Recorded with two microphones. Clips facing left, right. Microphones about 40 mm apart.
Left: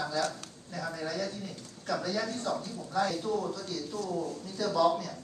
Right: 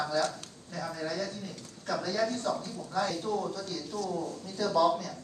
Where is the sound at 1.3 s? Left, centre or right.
Right.